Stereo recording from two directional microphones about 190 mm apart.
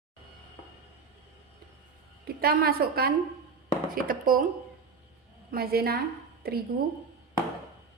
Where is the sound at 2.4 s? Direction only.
50° right (ahead or behind).